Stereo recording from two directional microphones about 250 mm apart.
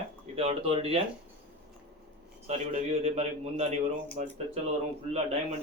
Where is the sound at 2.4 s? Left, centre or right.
Right.